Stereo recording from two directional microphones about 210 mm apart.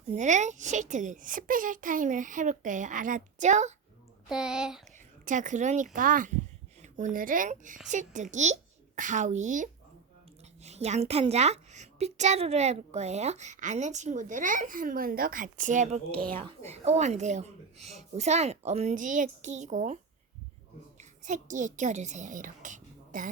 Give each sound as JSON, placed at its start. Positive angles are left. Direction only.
{"t": 0.2, "sound": "a woman's voice", "side_deg": -35}
{"t": 4.3, "sound": "speech", "side_deg": -5}
{"t": 5.2, "sound": "a woman's voice", "side_deg": -35}
{"t": 16.1, "sound": "speech", "side_deg": 5}
{"t": 16.4, "sound": "a woman's voice", "side_deg": -30}
{"t": 21.0, "sound": "a child's voice", "side_deg": -35}